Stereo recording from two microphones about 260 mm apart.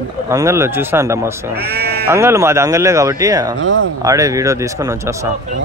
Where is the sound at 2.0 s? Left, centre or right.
Centre.